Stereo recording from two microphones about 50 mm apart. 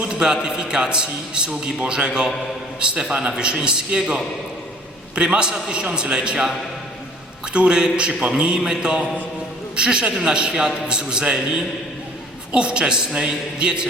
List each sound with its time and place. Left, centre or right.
0.0 s a sound: centre
0.4 s a man's voice: centre
7.5 s a man's voice: centre
12.5 s a man's voice: centre